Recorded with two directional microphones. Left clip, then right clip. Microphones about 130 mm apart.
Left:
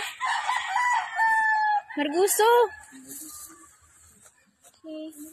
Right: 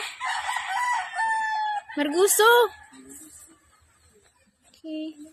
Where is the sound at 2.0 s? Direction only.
50° right (ahead or behind).